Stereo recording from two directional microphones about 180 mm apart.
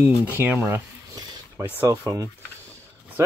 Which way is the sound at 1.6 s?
10° left (ahead or behind).